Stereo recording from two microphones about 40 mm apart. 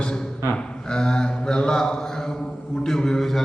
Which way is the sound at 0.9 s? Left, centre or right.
Left.